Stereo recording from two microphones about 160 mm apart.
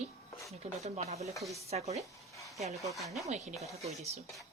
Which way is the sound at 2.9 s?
Centre (ahead or behind).